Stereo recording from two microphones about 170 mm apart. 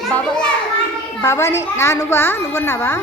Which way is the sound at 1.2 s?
15° left (ahead or behind).